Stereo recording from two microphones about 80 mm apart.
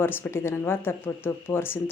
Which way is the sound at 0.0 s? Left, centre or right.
Left.